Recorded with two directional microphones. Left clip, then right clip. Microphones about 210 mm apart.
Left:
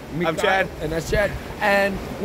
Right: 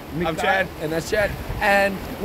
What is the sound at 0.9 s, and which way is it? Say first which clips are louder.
Speech: even; 15° right (ahead or behind).